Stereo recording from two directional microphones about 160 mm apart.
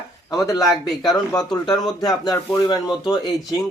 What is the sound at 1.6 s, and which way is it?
Speech, 25° left (ahead or behind).